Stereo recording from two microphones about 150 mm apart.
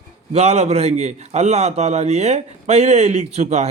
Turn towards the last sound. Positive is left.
turn(degrees=-50)  # may be behind; listen again after turning